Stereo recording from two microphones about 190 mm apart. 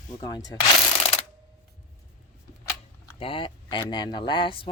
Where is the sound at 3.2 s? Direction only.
30° left (ahead or behind).